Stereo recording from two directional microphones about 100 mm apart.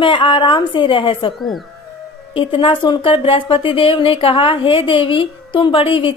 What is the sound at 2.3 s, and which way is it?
Speech, 60° left (ahead or behind).